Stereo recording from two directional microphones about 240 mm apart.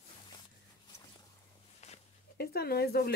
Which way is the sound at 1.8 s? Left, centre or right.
Left.